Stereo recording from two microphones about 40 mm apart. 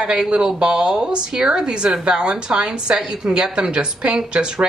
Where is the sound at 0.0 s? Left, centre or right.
Right.